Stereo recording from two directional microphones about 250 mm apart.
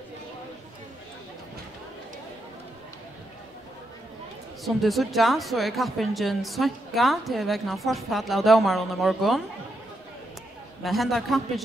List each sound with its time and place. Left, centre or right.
4.6 s speech: centre
10.8 s speech: centre